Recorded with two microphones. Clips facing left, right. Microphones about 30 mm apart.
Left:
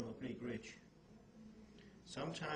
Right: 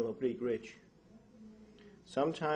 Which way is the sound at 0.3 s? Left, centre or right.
Centre.